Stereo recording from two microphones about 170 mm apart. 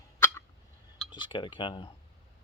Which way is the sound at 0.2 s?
15° left (ahead or behind).